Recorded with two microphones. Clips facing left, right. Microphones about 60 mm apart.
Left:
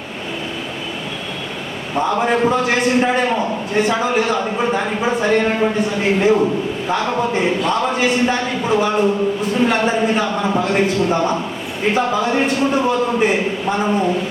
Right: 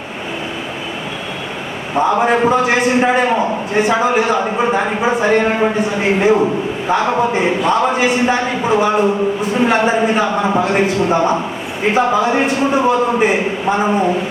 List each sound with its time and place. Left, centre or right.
2.0 s speech: centre